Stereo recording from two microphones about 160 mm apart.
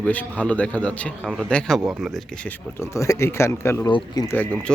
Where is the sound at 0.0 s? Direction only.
10° left (ahead or behind).